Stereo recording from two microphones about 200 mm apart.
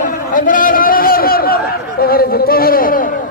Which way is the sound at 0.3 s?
40° left (ahead or behind).